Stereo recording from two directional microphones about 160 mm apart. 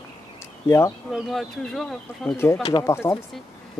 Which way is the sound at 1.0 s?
Centre (ahead or behind).